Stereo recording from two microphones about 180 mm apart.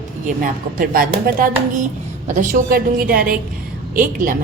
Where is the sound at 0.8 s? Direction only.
55° right (ahead or behind).